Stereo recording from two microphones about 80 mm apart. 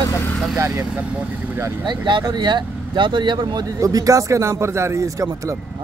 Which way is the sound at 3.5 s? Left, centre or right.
Right.